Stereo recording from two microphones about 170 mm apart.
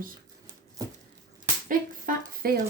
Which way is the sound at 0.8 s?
20° right (ahead or behind).